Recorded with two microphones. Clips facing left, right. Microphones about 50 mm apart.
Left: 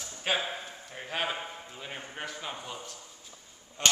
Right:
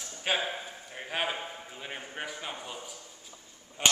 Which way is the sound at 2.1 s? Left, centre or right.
Centre.